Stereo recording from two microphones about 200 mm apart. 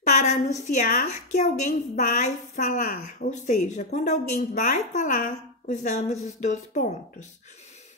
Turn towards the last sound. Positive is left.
turn(degrees=40)  # may be behind; listen again after turning